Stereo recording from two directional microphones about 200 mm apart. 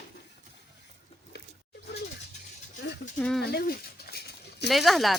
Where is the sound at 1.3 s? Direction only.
60° left (ahead or behind).